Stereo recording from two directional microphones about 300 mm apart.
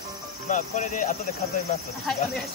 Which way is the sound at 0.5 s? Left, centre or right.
Left.